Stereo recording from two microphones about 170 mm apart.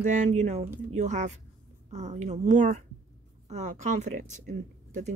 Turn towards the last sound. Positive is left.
turn(degrees=-45)  # may be behind; listen again after turning